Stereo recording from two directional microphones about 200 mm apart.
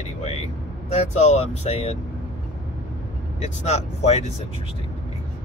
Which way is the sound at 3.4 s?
35° left (ahead or behind).